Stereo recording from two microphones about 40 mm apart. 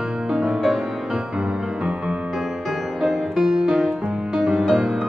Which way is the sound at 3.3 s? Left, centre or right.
Centre.